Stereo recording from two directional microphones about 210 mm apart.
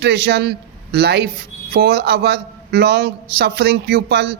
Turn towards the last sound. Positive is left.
turn(degrees=-50)  # may be behind; listen again after turning